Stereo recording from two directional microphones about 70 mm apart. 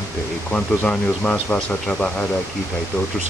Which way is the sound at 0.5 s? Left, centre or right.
Centre.